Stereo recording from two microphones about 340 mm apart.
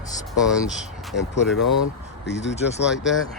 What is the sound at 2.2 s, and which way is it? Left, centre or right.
Speech, left.